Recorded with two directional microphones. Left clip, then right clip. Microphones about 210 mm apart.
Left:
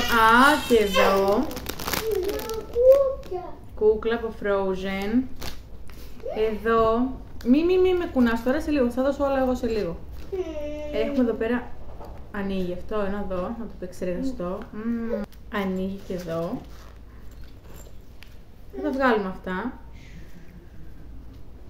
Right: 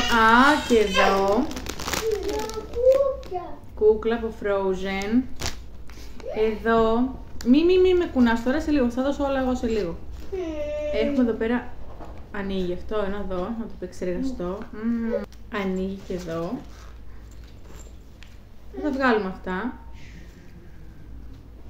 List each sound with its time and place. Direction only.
0.1 s speech: centre (ahead or behind)
2.2 s a sound: 15° left (ahead or behind)
3.8 s a woman's voice: centre (ahead or behind)
5.4 s a sound: 35° right (ahead or behind)
6.3 s a woman's voice: centre (ahead or behind)
10.9 s a woman's voice: 5° left (ahead or behind)
18.8 s a woman's voice: 5° left (ahead or behind)